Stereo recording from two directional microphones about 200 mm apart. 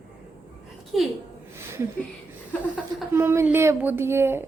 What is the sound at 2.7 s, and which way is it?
A woman's voice, 10° right (ahead or behind).